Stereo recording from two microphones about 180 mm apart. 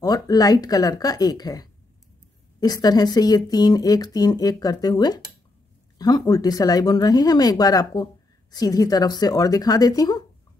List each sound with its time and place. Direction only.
0.0 s speech: 20° left (ahead or behind)